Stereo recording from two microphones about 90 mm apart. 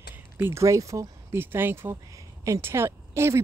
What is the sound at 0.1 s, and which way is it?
Speech, 25° right (ahead or behind).